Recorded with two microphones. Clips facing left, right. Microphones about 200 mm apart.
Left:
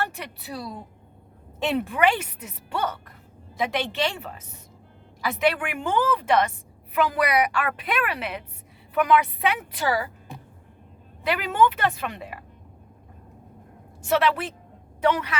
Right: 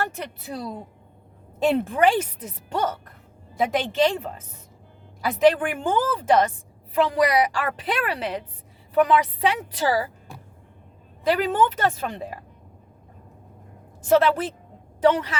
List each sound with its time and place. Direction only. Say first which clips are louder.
1.7 s a woman's voice: right 1 dB; 35° right (ahead or behind)
11.3 s a woman's voice: right 1 dB; 35° right (ahead or behind)
14.1 s a woman's voice: right 4 dB; 40° right (ahead or behind)